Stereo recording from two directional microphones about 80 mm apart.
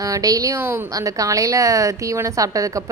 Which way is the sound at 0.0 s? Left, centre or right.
Right.